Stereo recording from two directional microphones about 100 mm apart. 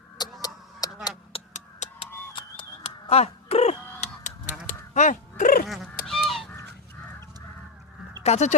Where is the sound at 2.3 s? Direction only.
55° left (ahead or behind).